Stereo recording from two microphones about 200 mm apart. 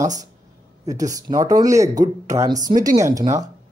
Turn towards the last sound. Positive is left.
turn(degrees=-15)  # may be behind; listen again after turning